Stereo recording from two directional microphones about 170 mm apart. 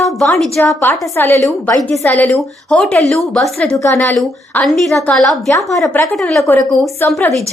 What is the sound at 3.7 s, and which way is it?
Speech, 15° left (ahead or behind).